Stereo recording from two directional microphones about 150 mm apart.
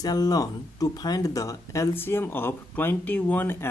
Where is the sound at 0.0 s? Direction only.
25° left (ahead or behind).